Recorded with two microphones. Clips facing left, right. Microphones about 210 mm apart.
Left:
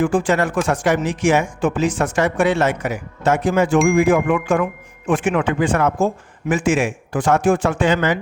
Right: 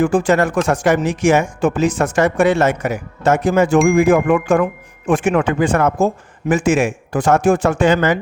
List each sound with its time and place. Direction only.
0.0 s speech: 40° right (ahead or behind)